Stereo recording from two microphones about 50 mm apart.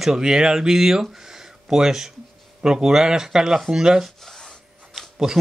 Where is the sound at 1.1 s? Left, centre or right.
Centre.